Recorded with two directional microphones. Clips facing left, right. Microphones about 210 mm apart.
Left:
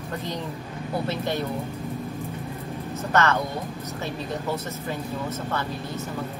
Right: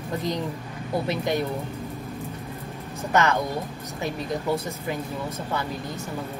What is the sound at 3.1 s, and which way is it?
Speech, 15° right (ahead or behind).